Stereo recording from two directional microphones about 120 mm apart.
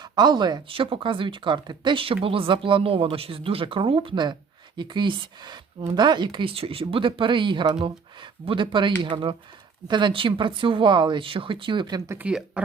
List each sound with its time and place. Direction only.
0.0 s speech: 35° right (ahead or behind)
12.1 s speech: 10° right (ahead or behind)